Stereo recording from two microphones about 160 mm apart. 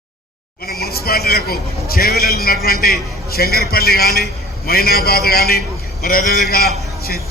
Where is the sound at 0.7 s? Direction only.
70° left (ahead or behind).